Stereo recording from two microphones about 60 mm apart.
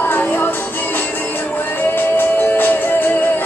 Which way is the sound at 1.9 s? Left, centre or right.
Left.